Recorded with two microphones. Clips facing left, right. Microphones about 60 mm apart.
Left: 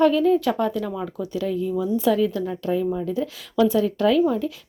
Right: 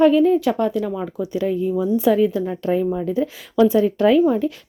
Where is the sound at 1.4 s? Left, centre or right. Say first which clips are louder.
Right 4 dB; right.